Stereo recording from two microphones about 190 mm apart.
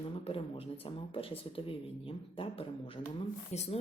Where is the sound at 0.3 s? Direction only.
30° left (ahead or behind).